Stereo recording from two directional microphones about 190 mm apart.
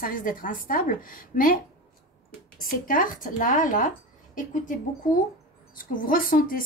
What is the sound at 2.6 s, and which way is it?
Speech, 45° left (ahead or behind).